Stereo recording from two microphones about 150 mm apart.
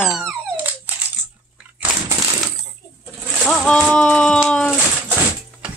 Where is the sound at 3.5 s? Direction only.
5° left (ahead or behind).